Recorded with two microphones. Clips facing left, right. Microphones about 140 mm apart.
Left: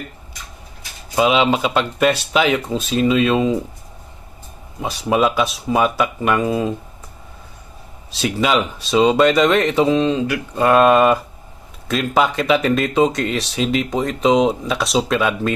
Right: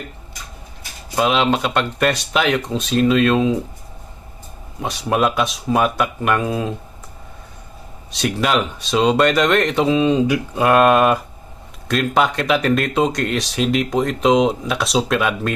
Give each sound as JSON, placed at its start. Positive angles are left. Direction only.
{"t": 1.1, "sound": "speech", "side_deg": 0}
{"t": 4.8, "sound": "speech", "side_deg": 0}
{"t": 8.1, "sound": "speech", "side_deg": 0}
{"t": 10.1, "sound": "speech", "side_deg": -20}
{"t": 10.5, "sound": "speech", "side_deg": 0}